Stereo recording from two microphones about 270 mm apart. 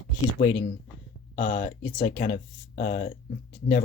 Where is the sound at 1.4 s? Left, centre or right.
Centre.